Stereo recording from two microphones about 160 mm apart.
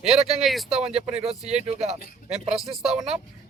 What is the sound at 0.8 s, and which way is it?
Speech, 40° right (ahead or behind).